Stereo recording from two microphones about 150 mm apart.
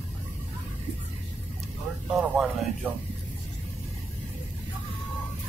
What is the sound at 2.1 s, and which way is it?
Speech, centre (ahead or behind).